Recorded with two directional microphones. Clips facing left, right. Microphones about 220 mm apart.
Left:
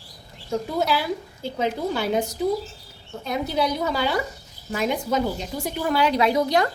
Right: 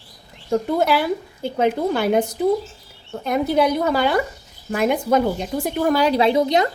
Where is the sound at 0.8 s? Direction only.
55° right (ahead or behind); by 6.7 s 25° right (ahead or behind).